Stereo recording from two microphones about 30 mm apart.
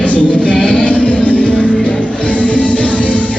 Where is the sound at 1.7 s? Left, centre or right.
Left.